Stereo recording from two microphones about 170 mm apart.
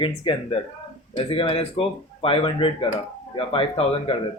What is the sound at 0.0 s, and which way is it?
A man's voice, 30° left (ahead or behind).